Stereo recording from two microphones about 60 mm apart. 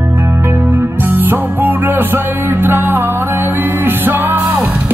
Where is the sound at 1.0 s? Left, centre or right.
Right.